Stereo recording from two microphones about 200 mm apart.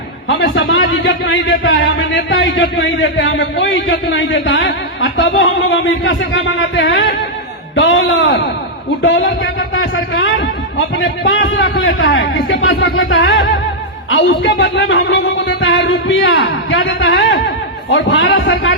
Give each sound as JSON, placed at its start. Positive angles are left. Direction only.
{"t": 0.3, "sound": "a man's voice", "side_deg": 70}
{"t": 17.9, "sound": "a man's voice", "side_deg": 75}